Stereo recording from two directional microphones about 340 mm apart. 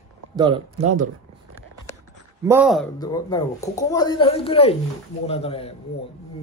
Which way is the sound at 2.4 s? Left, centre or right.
Centre.